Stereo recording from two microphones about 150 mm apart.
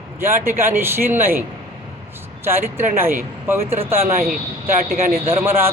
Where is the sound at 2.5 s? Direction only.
15° right (ahead or behind).